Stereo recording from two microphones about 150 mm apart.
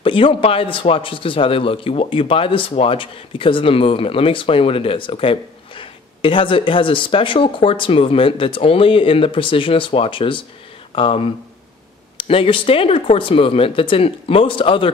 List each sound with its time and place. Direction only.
0.0 s speech: 35° left (ahead or behind)